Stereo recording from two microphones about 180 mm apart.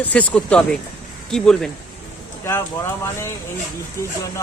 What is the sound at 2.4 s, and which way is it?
Speech, 15° left (ahead or behind).